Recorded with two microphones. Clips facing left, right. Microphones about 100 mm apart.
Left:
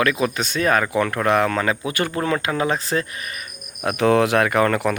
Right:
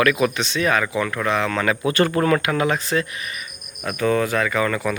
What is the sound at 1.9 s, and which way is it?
Speech, 15° left (ahead or behind).